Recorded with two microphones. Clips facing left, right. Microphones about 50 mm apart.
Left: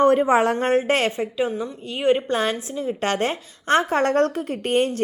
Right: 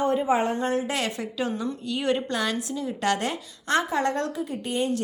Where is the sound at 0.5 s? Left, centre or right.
Left.